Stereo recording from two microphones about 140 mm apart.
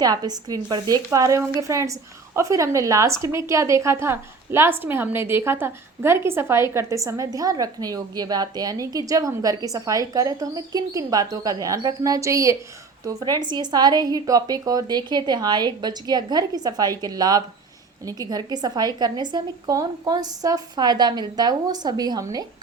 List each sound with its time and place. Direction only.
0.0 s a woman's voice: 25° right (ahead or behind)